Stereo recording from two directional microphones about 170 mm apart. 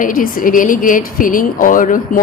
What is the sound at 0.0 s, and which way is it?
A woman's voice, 55° left (ahead or behind).